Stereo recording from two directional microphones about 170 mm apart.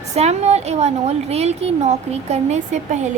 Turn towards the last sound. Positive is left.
turn(degrees=-45)  # may be behind; listen again after turning